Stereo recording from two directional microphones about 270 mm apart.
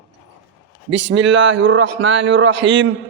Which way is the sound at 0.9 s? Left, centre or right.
Right.